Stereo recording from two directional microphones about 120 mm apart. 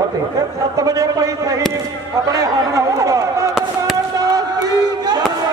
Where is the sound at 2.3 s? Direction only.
25° right (ahead or behind).